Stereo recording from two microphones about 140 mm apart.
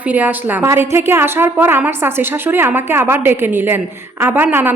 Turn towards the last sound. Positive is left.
turn(degrees=-15)  # may be behind; listen again after turning